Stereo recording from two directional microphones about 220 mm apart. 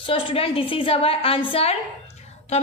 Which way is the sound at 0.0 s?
25° left (ahead or behind).